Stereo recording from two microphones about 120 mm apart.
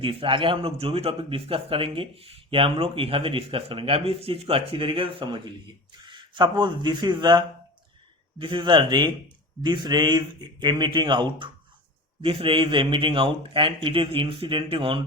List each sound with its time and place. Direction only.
0.0 s speech: 45° right (ahead or behind)